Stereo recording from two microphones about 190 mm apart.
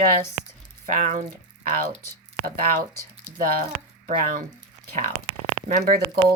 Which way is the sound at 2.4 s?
50° right (ahead or behind).